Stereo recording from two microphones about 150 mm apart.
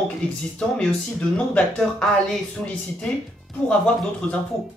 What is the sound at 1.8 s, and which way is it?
Speech, 5° left (ahead or behind).